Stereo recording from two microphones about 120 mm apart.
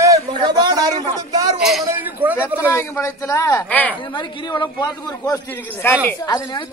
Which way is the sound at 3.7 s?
15° left (ahead or behind).